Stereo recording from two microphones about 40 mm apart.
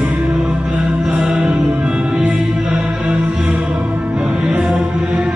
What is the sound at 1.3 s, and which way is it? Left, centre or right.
Music, centre.